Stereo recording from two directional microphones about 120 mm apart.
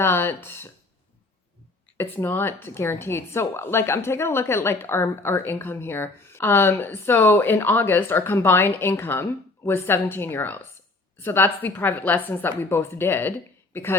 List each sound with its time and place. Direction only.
0.0 s speech: 20° left (ahead or behind)
2.0 s a woman's voice: 15° left (ahead or behind)